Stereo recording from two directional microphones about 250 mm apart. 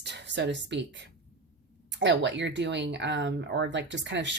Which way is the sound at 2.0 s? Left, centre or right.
Right.